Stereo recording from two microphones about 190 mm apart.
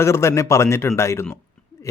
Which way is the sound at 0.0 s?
15° left (ahead or behind).